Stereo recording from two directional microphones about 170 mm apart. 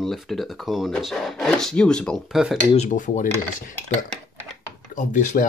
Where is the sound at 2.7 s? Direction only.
45° left (ahead or behind).